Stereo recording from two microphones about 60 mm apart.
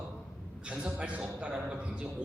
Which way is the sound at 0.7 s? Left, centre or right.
Centre.